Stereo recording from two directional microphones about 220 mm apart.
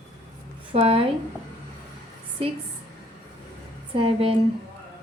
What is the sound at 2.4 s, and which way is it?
Speech, 25° right (ahead or behind).